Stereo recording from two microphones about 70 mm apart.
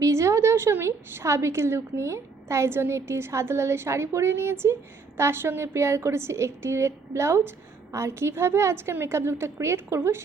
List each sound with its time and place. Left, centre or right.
0.0 s a woman's voice: right